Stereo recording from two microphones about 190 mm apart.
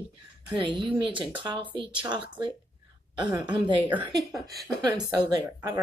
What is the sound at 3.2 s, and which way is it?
Speech, 25° right (ahead or behind).